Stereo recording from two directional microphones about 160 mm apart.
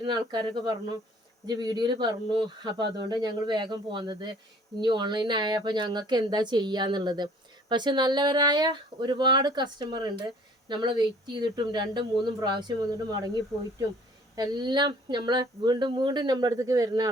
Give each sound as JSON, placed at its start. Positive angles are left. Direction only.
{"t": 0.0, "sound": "speech", "side_deg": -25}
{"t": 14.3, "sound": "speech", "side_deg": -25}